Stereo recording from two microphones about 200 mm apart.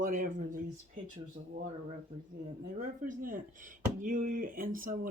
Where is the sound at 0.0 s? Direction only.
40° right (ahead or behind).